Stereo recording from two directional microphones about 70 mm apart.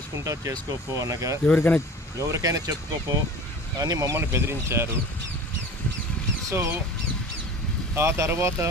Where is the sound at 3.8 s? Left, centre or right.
Right.